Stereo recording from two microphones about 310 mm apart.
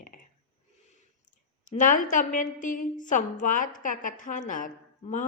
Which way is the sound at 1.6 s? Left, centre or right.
Left.